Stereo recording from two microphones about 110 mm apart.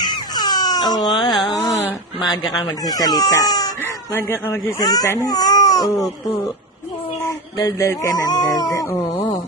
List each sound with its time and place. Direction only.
0.0 s cat: 40° left (ahead or behind)
1.3 s music: centre (ahead or behind)
2.6 s speech: 35° left (ahead or behind)
3.8 s speech: 20° left (ahead or behind)
4.8 s speech: 35° left (ahead or behind)
5.2 s baby cry: 35° left (ahead or behind)
7.2 s speech: 30° left (ahead or behind)